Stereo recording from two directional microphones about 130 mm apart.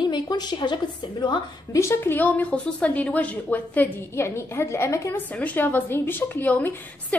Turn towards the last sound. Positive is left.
turn(degrees=10)  # may be behind; listen again after turning